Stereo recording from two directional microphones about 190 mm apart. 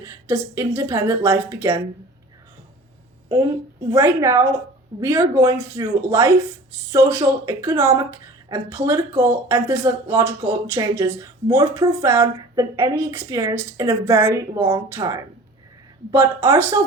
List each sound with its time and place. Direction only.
0.0 s speech: 15° right (ahead or behind)
3.2 s speech: 20° right (ahead or behind)